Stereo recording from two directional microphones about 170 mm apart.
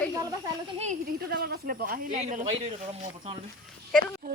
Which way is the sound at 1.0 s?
65° right (ahead or behind).